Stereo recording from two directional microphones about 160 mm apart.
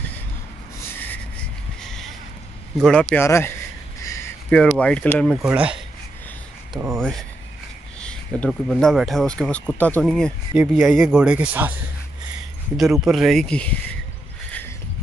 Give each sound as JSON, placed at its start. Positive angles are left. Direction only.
{"t": 1.8, "sound": "a sound", "side_deg": 5}
{"t": 2.8, "sound": "speech", "side_deg": 5}
{"t": 4.5, "sound": "speech", "side_deg": 5}
{"t": 5.2, "sound": "speech", "side_deg": -5}
{"t": 12.7, "sound": "speech", "side_deg": 0}